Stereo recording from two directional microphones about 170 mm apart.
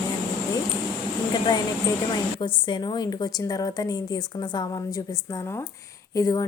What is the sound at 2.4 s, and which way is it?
A woman's voice, 25° left (ahead or behind).